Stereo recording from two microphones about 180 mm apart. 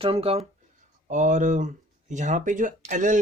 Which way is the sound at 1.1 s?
45° right (ahead or behind).